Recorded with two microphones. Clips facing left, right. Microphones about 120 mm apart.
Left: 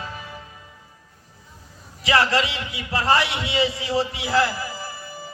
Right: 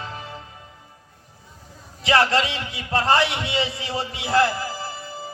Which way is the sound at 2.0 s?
25° right (ahead or behind).